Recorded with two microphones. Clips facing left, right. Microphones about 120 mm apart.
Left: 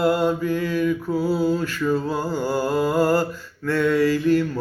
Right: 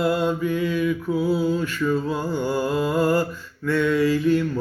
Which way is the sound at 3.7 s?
60° left (ahead or behind).